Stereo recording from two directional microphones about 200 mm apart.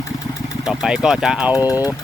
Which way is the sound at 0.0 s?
15° left (ahead or behind).